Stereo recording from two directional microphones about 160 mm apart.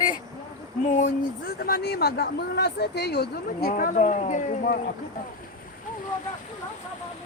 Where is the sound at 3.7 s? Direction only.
50° left (ahead or behind).